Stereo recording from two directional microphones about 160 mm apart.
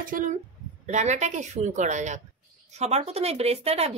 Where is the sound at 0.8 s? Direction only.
45° right (ahead or behind).